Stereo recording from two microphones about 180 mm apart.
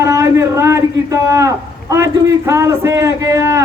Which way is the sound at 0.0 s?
15° right (ahead or behind).